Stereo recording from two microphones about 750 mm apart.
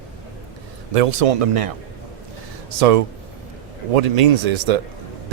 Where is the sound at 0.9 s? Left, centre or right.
Right.